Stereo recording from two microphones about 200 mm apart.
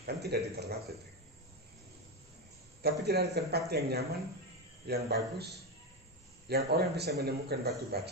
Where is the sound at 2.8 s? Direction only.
55° right (ahead or behind).